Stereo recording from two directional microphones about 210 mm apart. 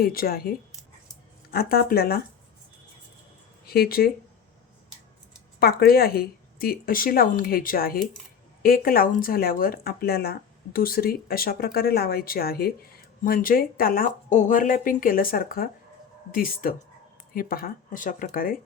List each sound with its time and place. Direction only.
0.0 s speech: 45° left (ahead or behind)
3.7 s speech: 45° left (ahead or behind)
5.5 s speech: 45° left (ahead or behind)